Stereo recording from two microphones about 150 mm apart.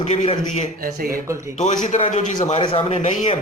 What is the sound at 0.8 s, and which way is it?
Speech, 75° right (ahead or behind).